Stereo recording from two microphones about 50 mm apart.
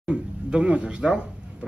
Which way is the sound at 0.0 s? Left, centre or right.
Right.